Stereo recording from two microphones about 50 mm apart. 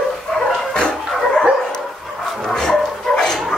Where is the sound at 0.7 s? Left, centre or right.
Centre.